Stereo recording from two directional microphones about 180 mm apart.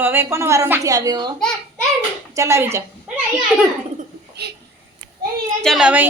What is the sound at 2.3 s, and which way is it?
Speech, 15° right (ahead or behind).